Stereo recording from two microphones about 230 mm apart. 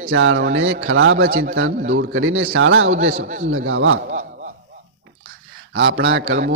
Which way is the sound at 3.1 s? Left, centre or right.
Right.